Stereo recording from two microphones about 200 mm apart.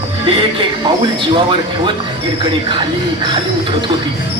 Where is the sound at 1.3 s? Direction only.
25° right (ahead or behind).